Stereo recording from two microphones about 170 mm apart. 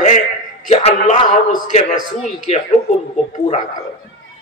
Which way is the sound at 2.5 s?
40° left (ahead or behind).